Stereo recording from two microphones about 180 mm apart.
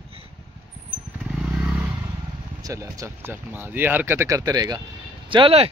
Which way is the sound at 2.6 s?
20° right (ahead or behind).